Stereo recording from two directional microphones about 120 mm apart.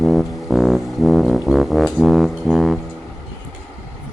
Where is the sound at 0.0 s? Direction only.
Centre (ahead or behind).